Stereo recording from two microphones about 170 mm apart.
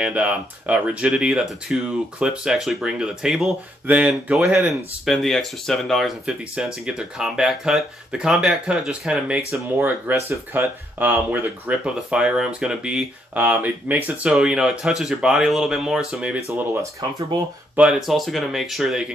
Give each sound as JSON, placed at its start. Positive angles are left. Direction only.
{"t": 0.0, "sound": "speech", "side_deg": -5}
{"t": 17.7, "sound": "speech", "side_deg": -5}